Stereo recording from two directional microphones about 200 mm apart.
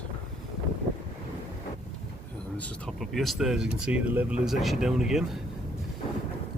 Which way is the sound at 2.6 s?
Centre (ahead or behind).